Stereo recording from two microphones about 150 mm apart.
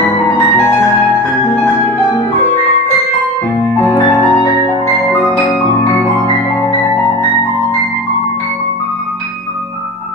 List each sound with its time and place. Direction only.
3.8 s music: 35° left (ahead or behind)